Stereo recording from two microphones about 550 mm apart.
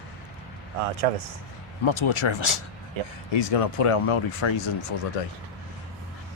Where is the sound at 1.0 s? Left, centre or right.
Right.